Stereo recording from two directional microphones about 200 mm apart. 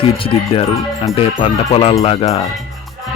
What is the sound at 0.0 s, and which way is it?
Speech, 25° left (ahead or behind).